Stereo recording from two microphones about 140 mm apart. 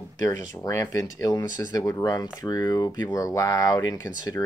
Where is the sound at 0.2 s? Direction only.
25° left (ahead or behind).